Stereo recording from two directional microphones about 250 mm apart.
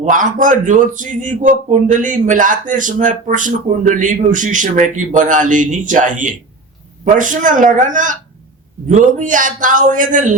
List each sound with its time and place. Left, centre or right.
0.0 s speech: right